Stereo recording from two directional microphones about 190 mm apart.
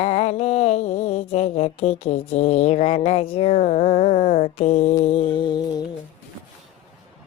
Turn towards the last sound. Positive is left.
turn(degrees=25)  # may be behind; listen again after turning